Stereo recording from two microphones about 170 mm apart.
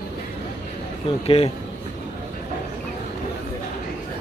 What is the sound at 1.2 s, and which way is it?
Speech, 35° left (ahead or behind).